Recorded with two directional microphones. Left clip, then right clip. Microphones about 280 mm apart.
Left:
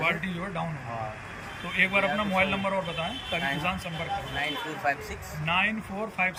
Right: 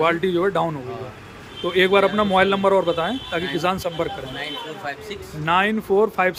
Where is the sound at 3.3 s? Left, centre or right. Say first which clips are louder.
Right 5 dB; centre.